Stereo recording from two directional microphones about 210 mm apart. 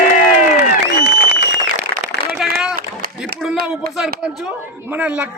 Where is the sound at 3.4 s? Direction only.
Centre (ahead or behind).